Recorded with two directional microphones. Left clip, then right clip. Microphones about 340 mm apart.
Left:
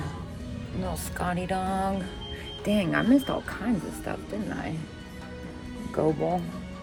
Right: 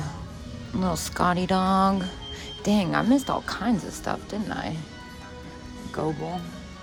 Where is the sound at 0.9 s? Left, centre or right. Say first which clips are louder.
Right 8 dB; centre.